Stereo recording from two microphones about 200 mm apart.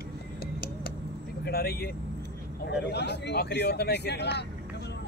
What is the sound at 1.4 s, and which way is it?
Speech, 50° left (ahead or behind).